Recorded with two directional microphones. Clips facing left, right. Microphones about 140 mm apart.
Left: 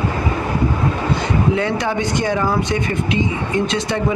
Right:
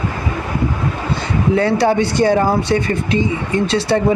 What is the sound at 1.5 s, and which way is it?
Speech, 35° right (ahead or behind).